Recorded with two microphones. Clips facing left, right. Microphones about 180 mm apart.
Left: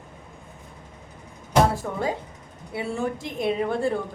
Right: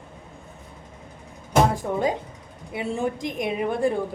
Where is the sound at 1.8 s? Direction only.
20° right (ahead or behind).